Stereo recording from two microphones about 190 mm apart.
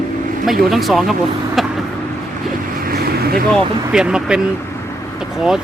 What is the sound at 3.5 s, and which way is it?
Speech, 5° right (ahead or behind).